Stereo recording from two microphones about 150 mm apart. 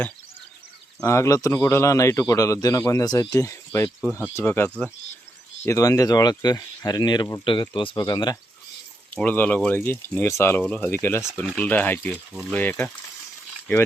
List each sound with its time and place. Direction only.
1.0 s a man's voice: 20° left (ahead or behind)
9.1 s speech: 10° left (ahead or behind)